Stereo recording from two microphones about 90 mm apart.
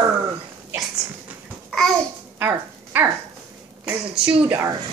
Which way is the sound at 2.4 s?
25° right (ahead or behind).